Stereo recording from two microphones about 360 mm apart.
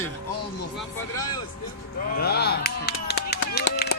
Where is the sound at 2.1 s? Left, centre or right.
Left.